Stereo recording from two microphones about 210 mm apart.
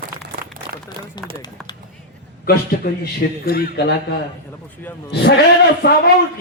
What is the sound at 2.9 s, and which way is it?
A man's voice, 45° left (ahead or behind).